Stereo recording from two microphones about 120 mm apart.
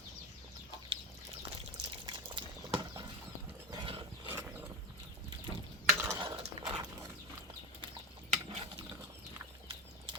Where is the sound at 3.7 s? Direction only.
45° right (ahead or behind).